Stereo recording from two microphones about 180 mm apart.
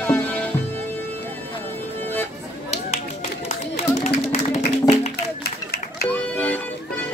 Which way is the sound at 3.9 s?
45° left (ahead or behind).